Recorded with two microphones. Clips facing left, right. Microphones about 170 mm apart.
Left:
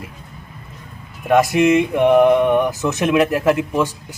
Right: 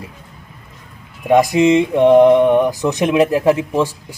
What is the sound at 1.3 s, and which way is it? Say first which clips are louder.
A man's voice: right 2 dB; 15° right (ahead or behind).